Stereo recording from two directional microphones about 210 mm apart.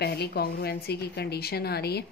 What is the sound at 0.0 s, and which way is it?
Speech, 50° left (ahead or behind).